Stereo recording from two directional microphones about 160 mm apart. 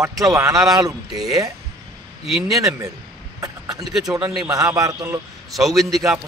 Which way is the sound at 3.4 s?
20° right (ahead or behind).